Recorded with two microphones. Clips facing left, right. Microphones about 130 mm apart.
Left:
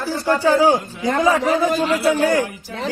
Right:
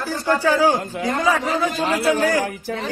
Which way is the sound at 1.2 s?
25° left (ahead or behind).